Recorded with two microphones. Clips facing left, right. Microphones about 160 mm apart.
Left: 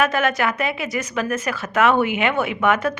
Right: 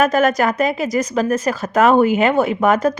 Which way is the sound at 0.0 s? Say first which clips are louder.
Right 5 dB; 40° right (ahead or behind).